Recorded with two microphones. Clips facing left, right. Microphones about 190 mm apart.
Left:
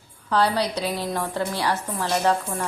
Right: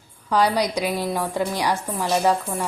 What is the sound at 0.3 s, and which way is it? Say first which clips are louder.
Dishes: right 2 dB; 10° right (ahead or behind).